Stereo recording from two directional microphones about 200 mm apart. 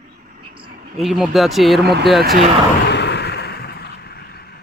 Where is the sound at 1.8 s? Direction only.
55° right (ahead or behind).